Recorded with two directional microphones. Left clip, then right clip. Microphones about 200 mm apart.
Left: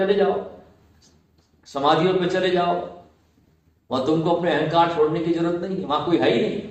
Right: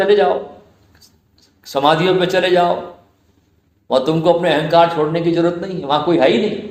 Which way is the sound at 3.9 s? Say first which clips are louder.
Right 7 dB; 40° right (ahead or behind).